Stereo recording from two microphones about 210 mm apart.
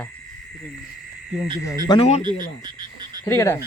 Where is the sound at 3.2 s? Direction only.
15° left (ahead or behind).